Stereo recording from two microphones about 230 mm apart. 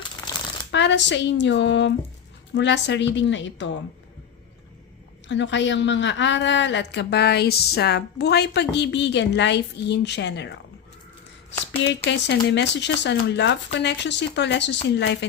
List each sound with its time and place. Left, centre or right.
0.7 s a woman's voice: left
5.3 s a woman's voice: left
11.8 s a woman's voice: left